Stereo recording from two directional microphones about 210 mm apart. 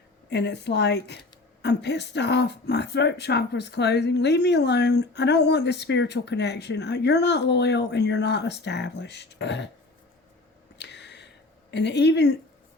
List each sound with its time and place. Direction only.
0.3 s a woman's voice: 55° left (ahead or behind)
10.8 s a sound: 55° left (ahead or behind)
11.7 s speech: 55° left (ahead or behind)